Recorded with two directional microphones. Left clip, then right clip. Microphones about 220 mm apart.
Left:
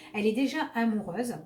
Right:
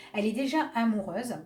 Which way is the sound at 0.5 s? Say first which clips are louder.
Right 2 dB; 45° right (ahead or behind).